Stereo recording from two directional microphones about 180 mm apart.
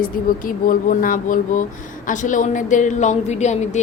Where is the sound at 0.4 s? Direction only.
50° left (ahead or behind).